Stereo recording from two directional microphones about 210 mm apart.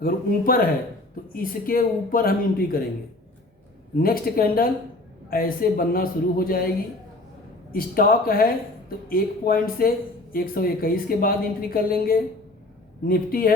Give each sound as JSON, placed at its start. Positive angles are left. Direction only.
{"t": 0.0, "sound": "a woman's voice", "side_deg": 45}
{"t": 3.9, "sound": "a woman's voice", "side_deg": 45}
{"t": 7.7, "sound": "a woman's voice", "side_deg": 45}